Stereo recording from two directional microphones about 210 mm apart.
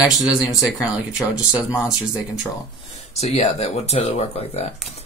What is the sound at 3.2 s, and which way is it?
Speech, 30° left (ahead or behind).